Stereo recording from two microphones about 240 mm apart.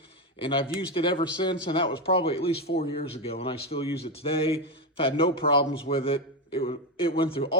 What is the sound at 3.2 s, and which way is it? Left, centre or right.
A man's voice, left.